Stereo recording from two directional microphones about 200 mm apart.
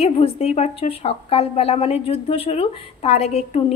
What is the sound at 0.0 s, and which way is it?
A woman's voice, 30° left (ahead or behind).